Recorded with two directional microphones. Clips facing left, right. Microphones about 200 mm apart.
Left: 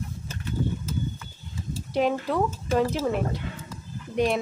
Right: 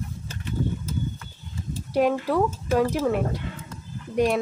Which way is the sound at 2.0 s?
10° right (ahead or behind).